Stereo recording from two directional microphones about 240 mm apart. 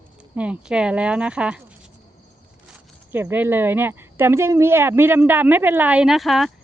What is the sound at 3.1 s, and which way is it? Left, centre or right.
Speech, centre.